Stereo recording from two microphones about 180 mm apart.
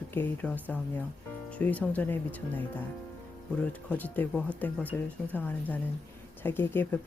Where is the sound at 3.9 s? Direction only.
10° left (ahead or behind).